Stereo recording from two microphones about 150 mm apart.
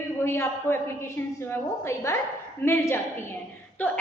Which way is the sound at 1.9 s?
20° left (ahead or behind).